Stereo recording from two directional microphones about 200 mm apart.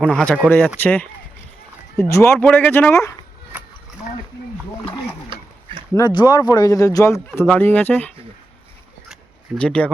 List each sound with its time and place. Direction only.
0.0 s speech: 5° left (ahead or behind)
5.9 s speech: 20° left (ahead or behind)
9.6 s speech: 5° left (ahead or behind)